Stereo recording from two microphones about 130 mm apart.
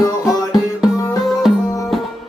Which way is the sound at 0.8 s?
Centre (ahead or behind).